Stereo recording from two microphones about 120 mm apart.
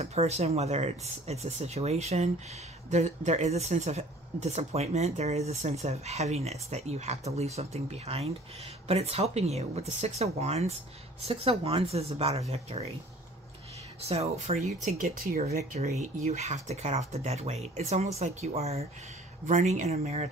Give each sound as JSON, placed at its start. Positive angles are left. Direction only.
{"t": 0.0, "sound": "speech", "side_deg": -60}
{"t": 11.2, "sound": "speech", "side_deg": -55}
{"t": 14.0, "sound": "speech", "side_deg": -60}
{"t": 19.4, "sound": "speech", "side_deg": -85}